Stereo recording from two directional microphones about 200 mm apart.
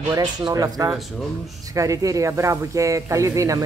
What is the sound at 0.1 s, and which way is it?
Speech, 20° right (ahead or behind).